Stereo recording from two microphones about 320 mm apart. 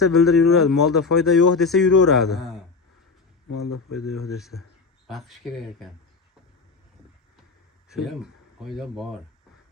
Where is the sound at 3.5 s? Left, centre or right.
Left.